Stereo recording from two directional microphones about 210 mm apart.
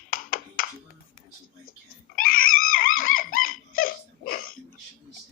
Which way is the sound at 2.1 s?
40° left (ahead or behind).